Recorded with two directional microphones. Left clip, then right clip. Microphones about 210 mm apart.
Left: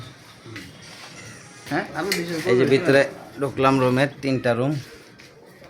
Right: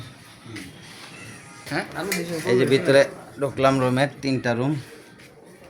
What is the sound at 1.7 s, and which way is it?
Speech, 35° left (ahead or behind).